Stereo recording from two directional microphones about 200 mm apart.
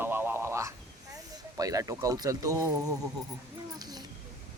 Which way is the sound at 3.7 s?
20° right (ahead or behind).